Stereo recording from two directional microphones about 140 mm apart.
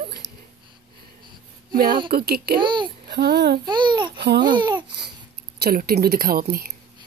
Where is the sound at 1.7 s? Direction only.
90° right.